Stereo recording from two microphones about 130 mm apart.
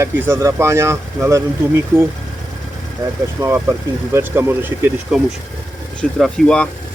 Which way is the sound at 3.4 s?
20° right (ahead or behind).